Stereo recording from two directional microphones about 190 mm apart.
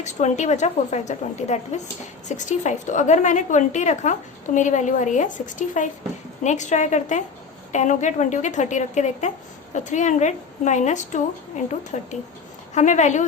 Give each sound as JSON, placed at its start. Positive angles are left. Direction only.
{"t": 0.0, "sound": "a woman's voice", "side_deg": 40}